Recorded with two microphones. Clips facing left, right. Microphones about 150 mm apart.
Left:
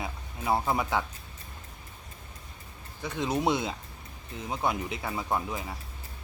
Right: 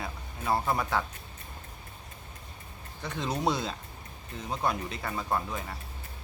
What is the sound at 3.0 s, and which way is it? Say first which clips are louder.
Speech: left 2 dB; 5° left (ahead or behind).